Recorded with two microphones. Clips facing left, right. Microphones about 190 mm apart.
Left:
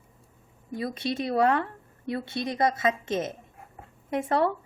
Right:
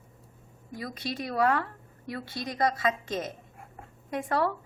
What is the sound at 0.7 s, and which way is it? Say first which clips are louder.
Speech: left 6 dB; 25° left (ahead or behind).